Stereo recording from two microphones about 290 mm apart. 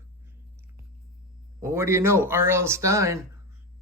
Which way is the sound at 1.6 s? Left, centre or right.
Centre.